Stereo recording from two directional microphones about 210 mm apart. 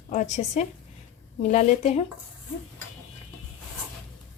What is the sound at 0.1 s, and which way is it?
Speech, 35° left (ahead or behind).